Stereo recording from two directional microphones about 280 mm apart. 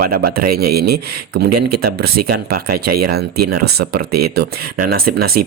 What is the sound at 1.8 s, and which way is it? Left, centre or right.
Speech, right.